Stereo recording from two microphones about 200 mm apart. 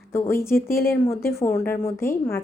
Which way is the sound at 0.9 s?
10° left (ahead or behind).